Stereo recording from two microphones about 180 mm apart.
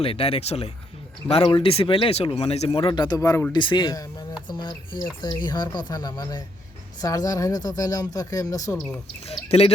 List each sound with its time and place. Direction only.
0.0 s speech: 30° left (ahead or behind)
9.2 s speech: 35° left (ahead or behind)